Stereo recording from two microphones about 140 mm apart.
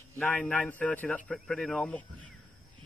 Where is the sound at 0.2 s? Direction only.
10° left (ahead or behind).